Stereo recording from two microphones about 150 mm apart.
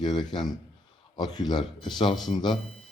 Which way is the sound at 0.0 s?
30° left (ahead or behind).